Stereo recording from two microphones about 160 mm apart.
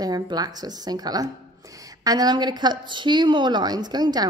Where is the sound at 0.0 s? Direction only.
25° right (ahead or behind).